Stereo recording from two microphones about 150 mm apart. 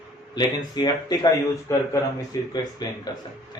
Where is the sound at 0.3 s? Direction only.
30° left (ahead or behind).